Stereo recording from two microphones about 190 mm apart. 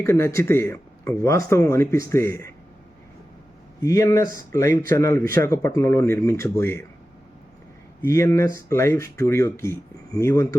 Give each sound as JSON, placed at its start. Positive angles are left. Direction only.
{"t": 0.0, "sound": "speech", "side_deg": 15}
{"t": 3.8, "sound": "speech", "side_deg": 15}
{"t": 8.0, "sound": "speech", "side_deg": 15}